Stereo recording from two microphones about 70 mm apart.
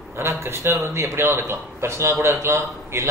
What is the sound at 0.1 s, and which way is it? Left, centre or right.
A man's voice, right.